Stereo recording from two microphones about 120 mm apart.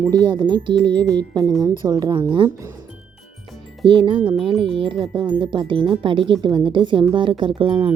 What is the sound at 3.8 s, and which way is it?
Speech, 45° right (ahead or behind).